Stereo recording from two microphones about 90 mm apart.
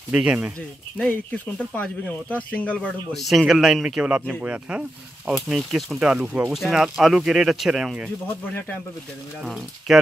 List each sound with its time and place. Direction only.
0.1 s speech: 10° right (ahead or behind)
0.9 s speech: 15° left (ahead or behind)
3.1 s speech: centre (ahead or behind)
9.4 s speech: 5° right (ahead or behind)